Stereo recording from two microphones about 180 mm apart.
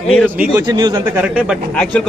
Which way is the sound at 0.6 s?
20° right (ahead or behind).